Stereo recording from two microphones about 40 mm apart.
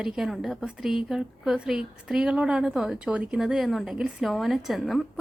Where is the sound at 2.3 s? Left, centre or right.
Right.